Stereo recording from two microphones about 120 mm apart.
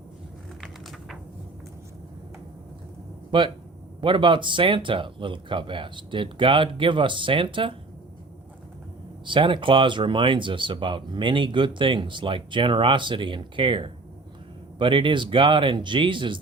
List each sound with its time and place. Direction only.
0.6 s a sound: centre (ahead or behind)
3.3 s speech: 40° right (ahead or behind)
9.2 s speech: 45° right (ahead or behind)